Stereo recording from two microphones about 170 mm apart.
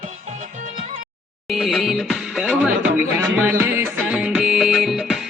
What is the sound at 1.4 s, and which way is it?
Music, centre (ahead or behind).